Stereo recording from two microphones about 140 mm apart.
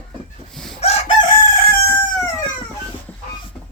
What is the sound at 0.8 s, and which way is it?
Chicken, 45° left (ahead or behind).